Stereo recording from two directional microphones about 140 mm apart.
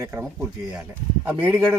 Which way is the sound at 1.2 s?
15° right (ahead or behind).